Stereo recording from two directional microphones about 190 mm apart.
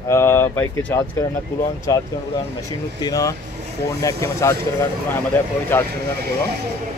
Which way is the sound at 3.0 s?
20° left (ahead or behind).